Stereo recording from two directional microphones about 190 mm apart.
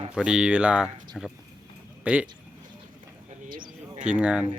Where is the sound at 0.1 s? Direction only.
5° right (ahead or behind).